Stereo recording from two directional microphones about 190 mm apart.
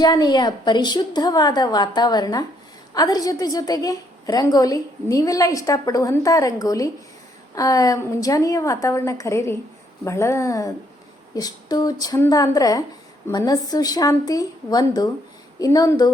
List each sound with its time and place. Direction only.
0.0 s a woman's voice: 20° left (ahead or behind)